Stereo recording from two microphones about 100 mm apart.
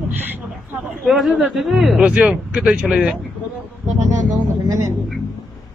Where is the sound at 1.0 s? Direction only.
5° right (ahead or behind).